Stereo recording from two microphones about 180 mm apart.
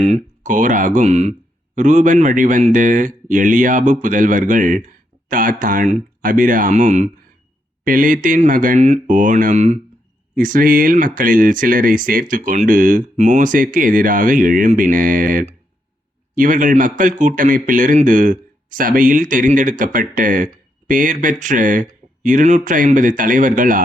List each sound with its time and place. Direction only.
0.0 s a man's voice: 40° right (ahead or behind)